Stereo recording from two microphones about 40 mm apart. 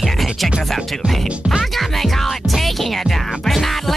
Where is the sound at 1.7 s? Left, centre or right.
Centre.